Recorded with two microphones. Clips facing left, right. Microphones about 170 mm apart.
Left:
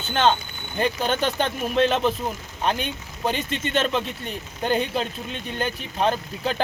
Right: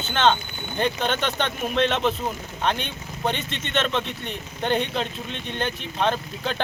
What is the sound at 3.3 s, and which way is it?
Speech, 40° left (ahead or behind).